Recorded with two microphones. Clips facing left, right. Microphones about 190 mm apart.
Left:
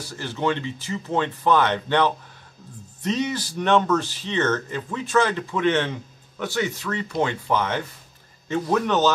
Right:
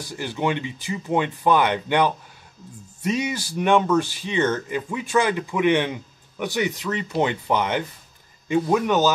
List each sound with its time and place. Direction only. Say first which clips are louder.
0.1 s speech: even; 15° right (ahead or behind)